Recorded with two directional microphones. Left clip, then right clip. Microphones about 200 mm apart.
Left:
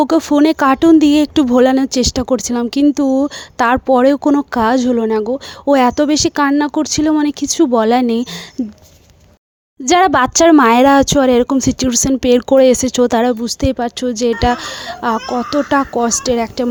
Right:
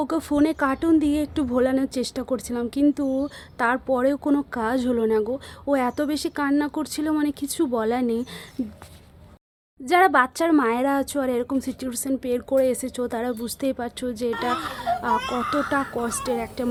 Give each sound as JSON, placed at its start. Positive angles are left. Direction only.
{"t": 0.0, "sound": "speech", "side_deg": 35}
{"t": 9.8, "sound": "speech", "side_deg": 45}